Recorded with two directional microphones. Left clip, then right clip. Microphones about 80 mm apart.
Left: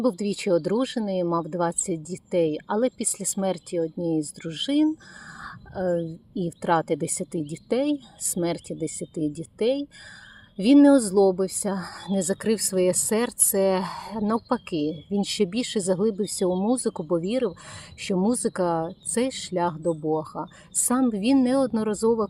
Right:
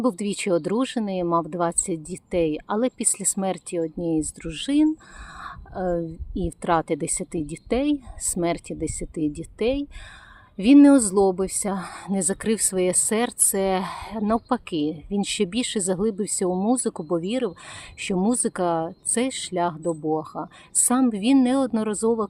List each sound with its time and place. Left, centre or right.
0.0 s a woman's voice: right
14.2 s speech: right
14.5 s speech: right
17.5 s speech: right